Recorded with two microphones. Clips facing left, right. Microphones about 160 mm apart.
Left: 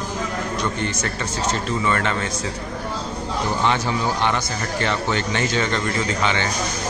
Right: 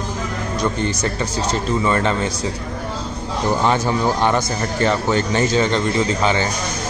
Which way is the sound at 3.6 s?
40° right (ahead or behind).